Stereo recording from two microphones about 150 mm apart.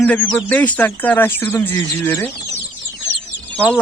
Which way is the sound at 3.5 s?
10° left (ahead or behind).